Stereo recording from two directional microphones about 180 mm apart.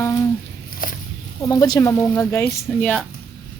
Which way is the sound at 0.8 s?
50° left (ahead or behind).